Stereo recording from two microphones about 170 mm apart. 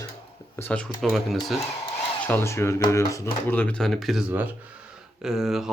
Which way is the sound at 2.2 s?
15° left (ahead or behind).